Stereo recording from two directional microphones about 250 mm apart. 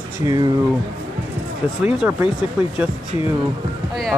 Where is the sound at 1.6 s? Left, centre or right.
Centre.